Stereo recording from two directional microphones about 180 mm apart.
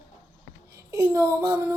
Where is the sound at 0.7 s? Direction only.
15° right (ahead or behind).